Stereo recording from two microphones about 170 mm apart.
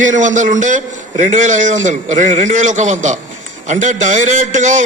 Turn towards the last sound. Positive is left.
turn(degrees=-45)  # may be behind; listen again after turning